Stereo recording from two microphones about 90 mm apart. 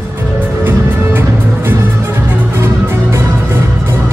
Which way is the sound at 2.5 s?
30° right (ahead or behind).